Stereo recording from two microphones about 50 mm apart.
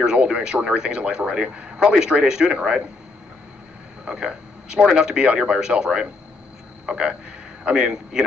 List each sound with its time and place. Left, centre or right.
0.2 s speech: centre
4.0 s speech: centre